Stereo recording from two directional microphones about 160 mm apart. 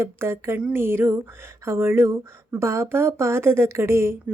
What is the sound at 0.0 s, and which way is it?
Speech, 15° right (ahead or behind).